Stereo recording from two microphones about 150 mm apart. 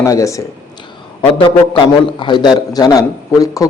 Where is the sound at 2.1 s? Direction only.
30° left (ahead or behind).